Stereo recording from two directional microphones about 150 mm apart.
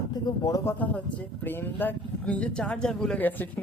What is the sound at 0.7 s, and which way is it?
Speech, 10° left (ahead or behind).